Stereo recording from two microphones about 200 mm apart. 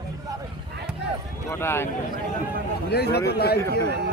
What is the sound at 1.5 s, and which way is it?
Speech, 10° left (ahead or behind).